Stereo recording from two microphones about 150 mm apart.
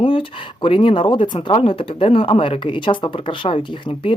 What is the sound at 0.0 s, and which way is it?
Speech, 35° left (ahead or behind).